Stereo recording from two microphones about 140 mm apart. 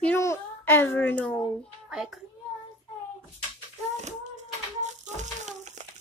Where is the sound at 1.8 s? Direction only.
5° right (ahead or behind).